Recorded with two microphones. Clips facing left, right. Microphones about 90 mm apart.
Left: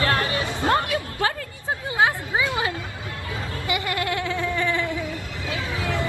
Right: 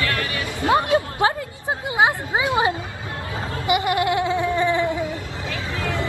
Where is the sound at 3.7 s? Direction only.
20° right (ahead or behind).